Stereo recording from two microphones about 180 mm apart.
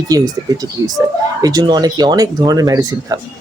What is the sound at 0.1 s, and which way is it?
Speech, 20° right (ahead or behind).